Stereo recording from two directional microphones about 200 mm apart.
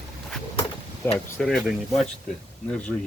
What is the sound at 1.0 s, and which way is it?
Speech, 10° left (ahead or behind).